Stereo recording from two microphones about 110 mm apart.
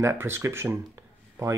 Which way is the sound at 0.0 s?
25° right (ahead or behind).